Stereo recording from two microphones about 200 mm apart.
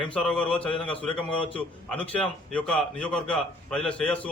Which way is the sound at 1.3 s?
25° left (ahead or behind).